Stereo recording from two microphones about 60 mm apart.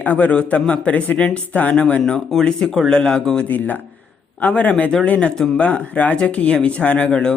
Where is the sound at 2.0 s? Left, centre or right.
Centre.